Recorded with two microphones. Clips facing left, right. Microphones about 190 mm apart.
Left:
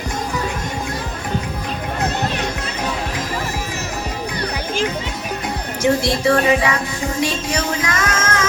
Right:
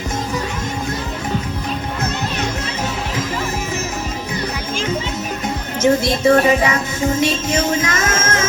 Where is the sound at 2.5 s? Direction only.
25° right (ahead or behind).